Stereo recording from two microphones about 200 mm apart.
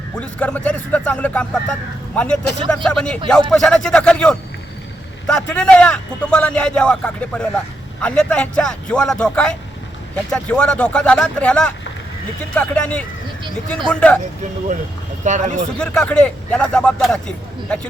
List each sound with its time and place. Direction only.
0.2 s a man's voice: 5° left (ahead or behind)
15.2 s speech: 40° right (ahead or behind)
15.8 s a man's voice: 5° left (ahead or behind)